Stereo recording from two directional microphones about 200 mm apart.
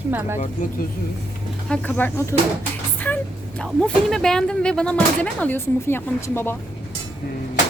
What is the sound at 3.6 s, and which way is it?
Speech, centre (ahead or behind).